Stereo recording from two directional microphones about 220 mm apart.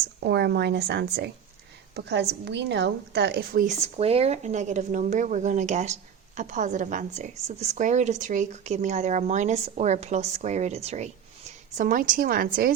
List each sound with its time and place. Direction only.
0.3 s a woman's voice: 50° right (ahead or behind)